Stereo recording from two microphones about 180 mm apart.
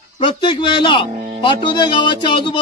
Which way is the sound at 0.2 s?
25° left (ahead or behind).